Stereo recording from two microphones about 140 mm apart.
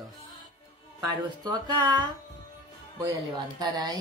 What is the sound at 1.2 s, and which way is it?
Speech, 30° right (ahead or behind).